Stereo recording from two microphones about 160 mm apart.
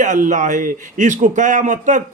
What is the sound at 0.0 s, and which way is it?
Speech, 50° right (ahead or behind).